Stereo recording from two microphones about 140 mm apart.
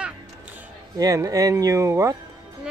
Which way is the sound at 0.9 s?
25° right (ahead or behind).